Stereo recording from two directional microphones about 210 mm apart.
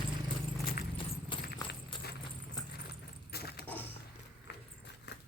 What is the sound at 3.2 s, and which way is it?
Keys jangling, 50° left (ahead or behind).